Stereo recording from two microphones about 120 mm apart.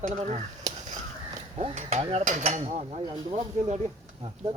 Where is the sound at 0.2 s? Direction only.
85° right.